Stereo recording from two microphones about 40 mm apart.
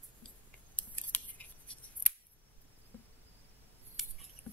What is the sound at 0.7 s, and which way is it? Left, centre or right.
Scissors, left.